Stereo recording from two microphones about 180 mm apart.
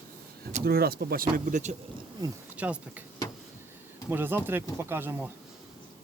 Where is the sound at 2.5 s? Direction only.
10° right (ahead or behind).